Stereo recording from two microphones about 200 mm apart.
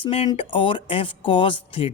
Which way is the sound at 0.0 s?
25° left (ahead or behind).